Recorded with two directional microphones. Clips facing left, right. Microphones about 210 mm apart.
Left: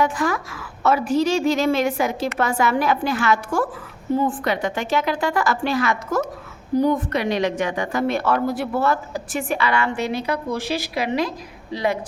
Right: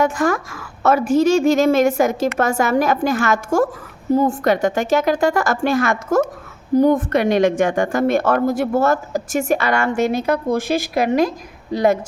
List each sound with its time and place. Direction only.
0.0 s a woman's voice: 45° right (ahead or behind)